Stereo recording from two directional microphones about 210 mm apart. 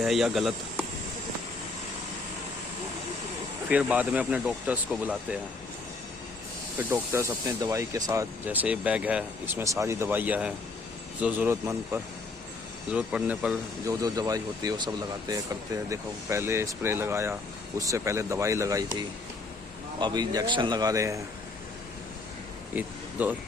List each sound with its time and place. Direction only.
0.0 s speech: centre (ahead or behind)
3.7 s speech: 5° right (ahead or behind)
6.7 s speech: 15° right (ahead or behind)
13.8 s a man's voice: 15° right (ahead or behind)
22.7 s speech: 10° right (ahead or behind)